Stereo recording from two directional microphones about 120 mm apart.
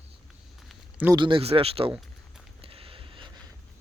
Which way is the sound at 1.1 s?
45° right (ahead or behind).